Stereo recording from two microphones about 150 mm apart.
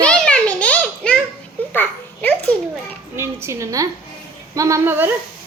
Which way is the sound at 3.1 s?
20° right (ahead or behind).